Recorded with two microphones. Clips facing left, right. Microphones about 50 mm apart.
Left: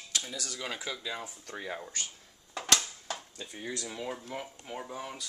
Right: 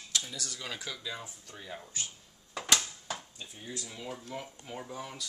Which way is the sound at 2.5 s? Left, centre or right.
Centre.